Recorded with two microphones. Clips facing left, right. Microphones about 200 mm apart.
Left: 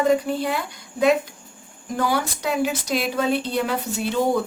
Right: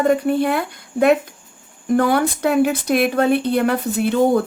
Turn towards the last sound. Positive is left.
turn(degrees=-55)  # may be behind; listen again after turning